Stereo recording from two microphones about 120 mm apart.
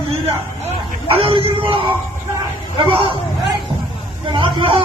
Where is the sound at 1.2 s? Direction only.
45° right (ahead or behind).